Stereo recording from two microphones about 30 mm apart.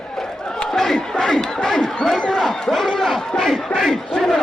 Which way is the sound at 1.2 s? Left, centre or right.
Centre.